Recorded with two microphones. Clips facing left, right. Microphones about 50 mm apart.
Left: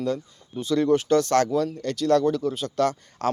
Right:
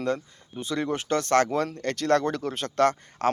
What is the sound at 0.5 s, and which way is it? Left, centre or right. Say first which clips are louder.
Speech: left 7 dB; right.